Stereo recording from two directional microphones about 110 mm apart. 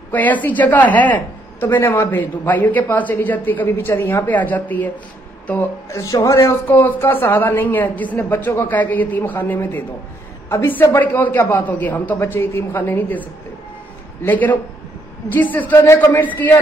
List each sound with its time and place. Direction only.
0.1 s speech: 15° left (ahead or behind)
5.9 s a woman's voice: 30° left (ahead or behind)